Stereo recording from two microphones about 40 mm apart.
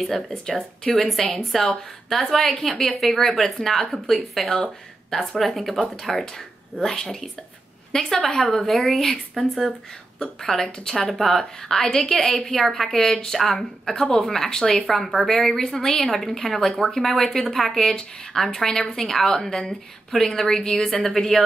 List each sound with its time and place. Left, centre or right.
0.3 s a woman's voice: centre
4.4 s a woman's voice: centre
5.4 s speech: centre
5.8 s a woman's voice: centre
8.6 s a woman's voice: centre
11.1 s a woman's voice: centre
13.0 s speech: centre
13.3 s a woman's voice: centre